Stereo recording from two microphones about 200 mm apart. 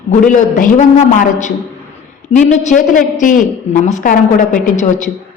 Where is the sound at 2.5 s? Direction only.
35° left (ahead or behind).